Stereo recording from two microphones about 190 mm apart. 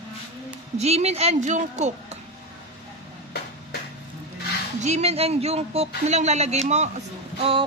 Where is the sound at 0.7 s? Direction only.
35° right (ahead or behind).